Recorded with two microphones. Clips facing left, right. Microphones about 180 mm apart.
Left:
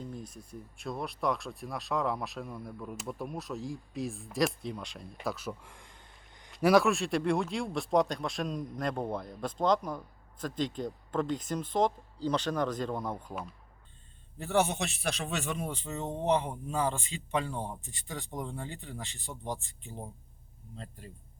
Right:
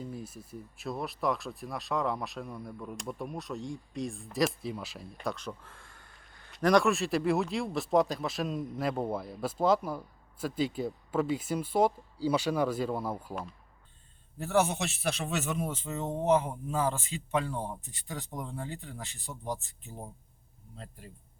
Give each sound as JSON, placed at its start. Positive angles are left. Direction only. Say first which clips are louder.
{"t": 0.0, "sound": "speech", "louder": "right 2 dB", "side_deg": -5}
{"t": 5.2, "sound": "a sound", "louder": "even", "side_deg": 5}
{"t": 6.5, "sound": "speech", "louder": "left 1 dB", "side_deg": 5}
{"t": 14.3, "sound": "speech", "louder": "right 1 dB", "side_deg": 0}